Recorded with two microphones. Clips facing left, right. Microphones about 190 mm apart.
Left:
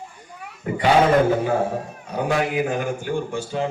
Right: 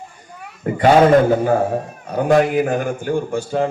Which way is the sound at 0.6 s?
45° right (ahead or behind).